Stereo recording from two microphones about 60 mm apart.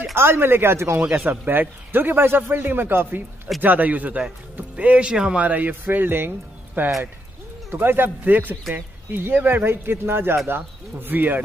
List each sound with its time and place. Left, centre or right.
0.1 s speech: right
1.3 s speech: right